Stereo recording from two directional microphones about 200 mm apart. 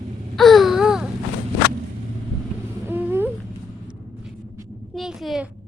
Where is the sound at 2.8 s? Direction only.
10° right (ahead or behind).